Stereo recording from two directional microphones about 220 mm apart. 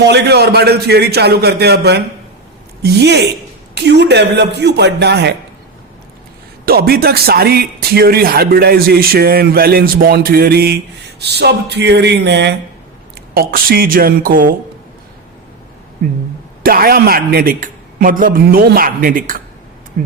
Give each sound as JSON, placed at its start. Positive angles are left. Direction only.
{"t": 0.0, "sound": "speech", "side_deg": -50}
{"t": 6.7, "sound": "a man's voice", "side_deg": -45}
{"t": 16.6, "sound": "a man's voice", "side_deg": -45}